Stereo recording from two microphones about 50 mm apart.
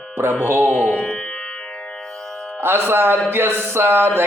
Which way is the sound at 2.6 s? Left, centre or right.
Right.